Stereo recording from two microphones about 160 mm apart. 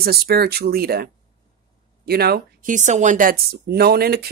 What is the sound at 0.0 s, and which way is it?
Speech, 75° right (ahead or behind).